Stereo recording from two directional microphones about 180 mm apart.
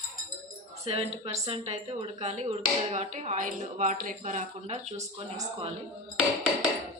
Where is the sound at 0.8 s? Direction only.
35° right (ahead or behind).